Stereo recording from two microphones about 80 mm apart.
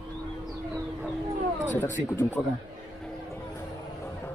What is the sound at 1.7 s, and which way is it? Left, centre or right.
Speech, left.